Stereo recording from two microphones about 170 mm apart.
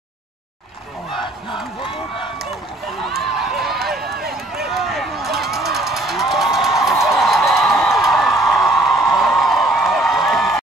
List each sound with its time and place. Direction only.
3.2 s run: centre (ahead or behind)
4.2 s run: 65° right (ahead or behind)
4.6 s run: centre (ahead or behind)
5.4 s a sound: centre (ahead or behind)